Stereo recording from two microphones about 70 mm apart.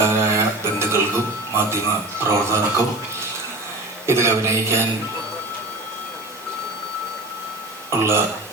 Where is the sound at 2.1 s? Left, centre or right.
Right.